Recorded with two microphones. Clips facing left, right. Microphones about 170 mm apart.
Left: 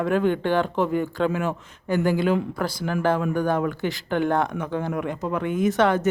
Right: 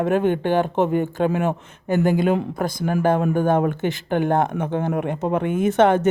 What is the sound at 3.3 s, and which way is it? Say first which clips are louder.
Speech: right 4 dB; 50° right (ahead or behind).